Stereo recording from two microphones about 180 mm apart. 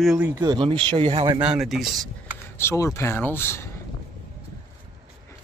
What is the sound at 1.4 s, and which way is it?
Speech, 5° right (ahead or behind).